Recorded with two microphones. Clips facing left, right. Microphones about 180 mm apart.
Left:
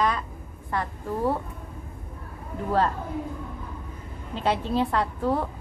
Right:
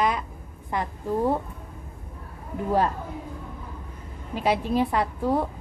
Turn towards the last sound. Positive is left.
turn(degrees=-15)  # may be behind; listen again after turning